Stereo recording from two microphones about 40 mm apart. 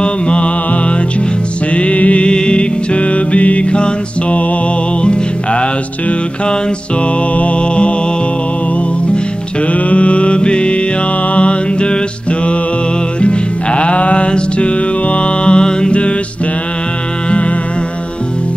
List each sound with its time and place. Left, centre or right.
0.0 s music: left
9.7 s music: left